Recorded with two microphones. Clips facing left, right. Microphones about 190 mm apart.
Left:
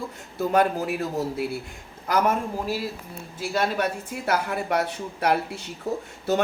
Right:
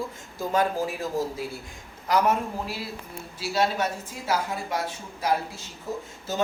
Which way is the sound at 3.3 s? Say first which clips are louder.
Even; 55° left (ahead or behind).